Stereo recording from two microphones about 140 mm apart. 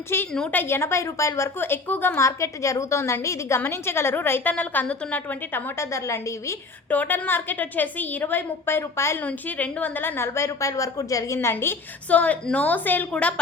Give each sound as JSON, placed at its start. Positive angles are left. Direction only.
{"t": 0.3, "sound": "a woman's voice", "side_deg": 10}